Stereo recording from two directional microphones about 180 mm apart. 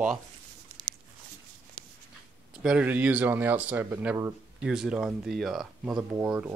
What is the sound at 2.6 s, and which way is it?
Speech, 5° right (ahead or behind).